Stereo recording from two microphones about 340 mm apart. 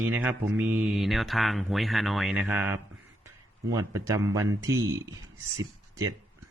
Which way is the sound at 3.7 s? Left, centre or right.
Centre.